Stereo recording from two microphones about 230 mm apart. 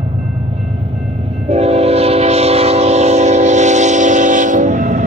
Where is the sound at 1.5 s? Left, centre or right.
Right.